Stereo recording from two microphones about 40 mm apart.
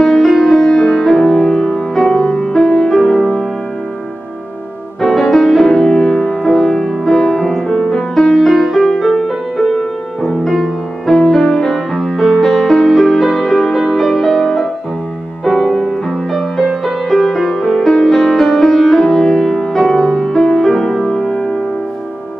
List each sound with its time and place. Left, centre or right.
0.0 s music: centre
5.0 s music: centre
10.5 s music: centre
19.9 s music: centre
21.0 s music: left